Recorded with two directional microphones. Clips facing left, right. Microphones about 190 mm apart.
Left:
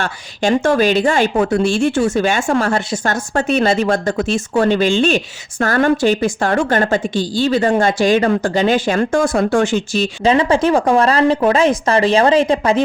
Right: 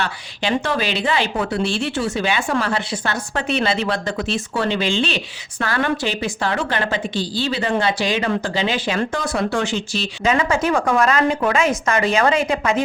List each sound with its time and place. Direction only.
0.0 s a woman's voice: 45° left (ahead or behind)
10.2 s speech: 30° left (ahead or behind)